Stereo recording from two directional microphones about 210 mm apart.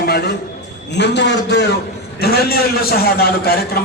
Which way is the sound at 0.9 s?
55° left (ahead or behind).